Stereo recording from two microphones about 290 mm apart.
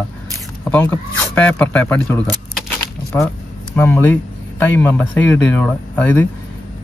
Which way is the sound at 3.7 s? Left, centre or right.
Centre.